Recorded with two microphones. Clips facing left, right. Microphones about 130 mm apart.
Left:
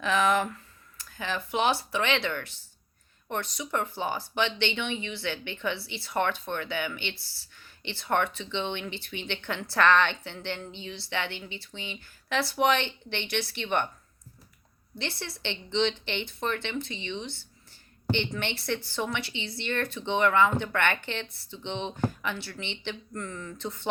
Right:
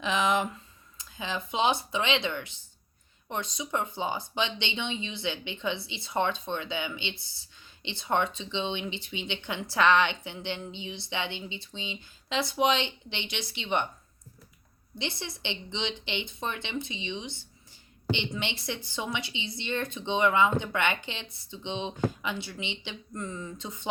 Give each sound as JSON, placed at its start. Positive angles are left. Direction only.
{"t": 0.0, "sound": "speech", "side_deg": -20}
{"t": 14.9, "sound": "speech", "side_deg": -20}